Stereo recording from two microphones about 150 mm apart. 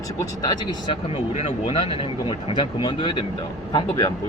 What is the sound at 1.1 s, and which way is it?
Speech, 40° left (ahead or behind).